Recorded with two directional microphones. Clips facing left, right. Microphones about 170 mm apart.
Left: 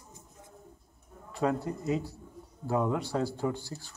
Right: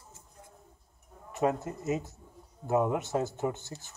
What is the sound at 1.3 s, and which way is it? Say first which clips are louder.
Speech: even; 20° right (ahead or behind).